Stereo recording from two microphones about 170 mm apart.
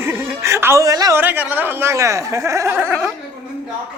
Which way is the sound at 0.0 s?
10° right (ahead or behind).